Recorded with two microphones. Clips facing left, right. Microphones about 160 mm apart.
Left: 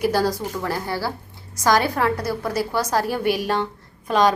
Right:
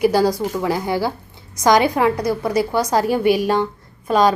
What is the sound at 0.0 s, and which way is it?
A woman's voice, 10° right (ahead or behind).